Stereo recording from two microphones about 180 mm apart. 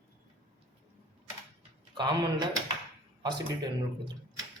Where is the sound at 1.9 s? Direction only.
25° right (ahead or behind).